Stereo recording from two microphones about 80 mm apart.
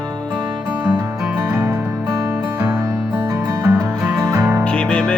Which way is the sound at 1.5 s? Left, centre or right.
Right.